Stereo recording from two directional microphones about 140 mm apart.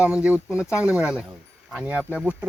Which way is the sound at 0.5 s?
20° left (ahead or behind).